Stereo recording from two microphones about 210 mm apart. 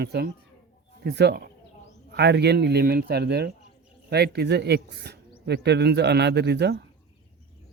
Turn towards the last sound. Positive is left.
turn(degrees=-50)  # may be behind; listen again after turning